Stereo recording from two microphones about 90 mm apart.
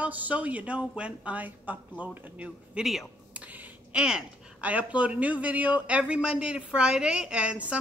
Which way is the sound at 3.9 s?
10° right (ahead or behind).